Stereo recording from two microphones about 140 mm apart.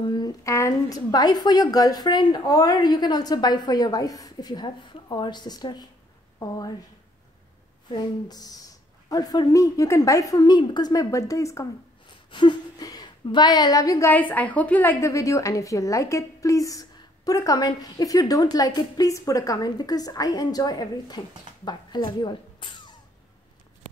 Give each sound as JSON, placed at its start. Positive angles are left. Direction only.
{"t": 0.0, "sound": "a sound", "side_deg": 30}
{"t": 0.4, "sound": "a woman's voice", "side_deg": 20}
{"t": 7.9, "sound": "a woman's voice", "side_deg": 30}
{"t": 12.3, "sound": "a woman's voice", "side_deg": 35}
{"t": 14.1, "sound": "a woman's voice", "side_deg": 10}